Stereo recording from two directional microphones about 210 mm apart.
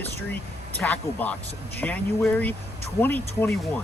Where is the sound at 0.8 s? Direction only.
10° left (ahead or behind).